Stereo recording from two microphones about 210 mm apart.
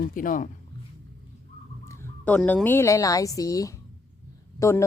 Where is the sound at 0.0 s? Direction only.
40° left (ahead or behind).